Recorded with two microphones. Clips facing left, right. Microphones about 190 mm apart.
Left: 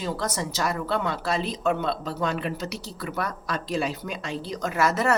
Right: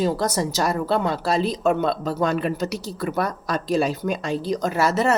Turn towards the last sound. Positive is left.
turn(degrees=-30)  # may be behind; listen again after turning